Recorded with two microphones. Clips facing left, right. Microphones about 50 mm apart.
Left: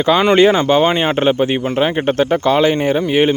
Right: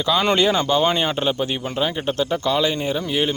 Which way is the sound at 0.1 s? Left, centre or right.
Left.